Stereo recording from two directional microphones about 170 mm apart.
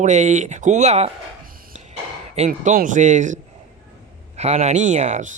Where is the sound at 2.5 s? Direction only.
55° right (ahead or behind).